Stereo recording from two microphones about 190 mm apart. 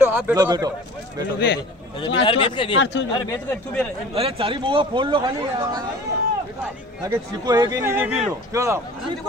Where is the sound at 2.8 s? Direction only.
70° left (ahead or behind).